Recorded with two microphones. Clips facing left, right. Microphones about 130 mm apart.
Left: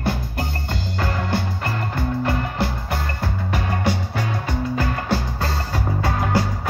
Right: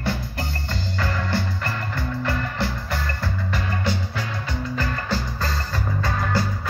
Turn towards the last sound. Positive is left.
turn(degrees=65)  # may be behind; listen again after turning